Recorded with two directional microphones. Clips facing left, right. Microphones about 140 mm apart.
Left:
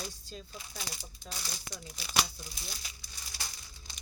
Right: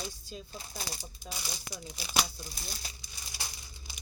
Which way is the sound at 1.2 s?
10° right (ahead or behind).